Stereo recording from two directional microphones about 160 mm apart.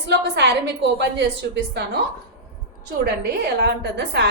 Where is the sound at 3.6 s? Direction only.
90° right.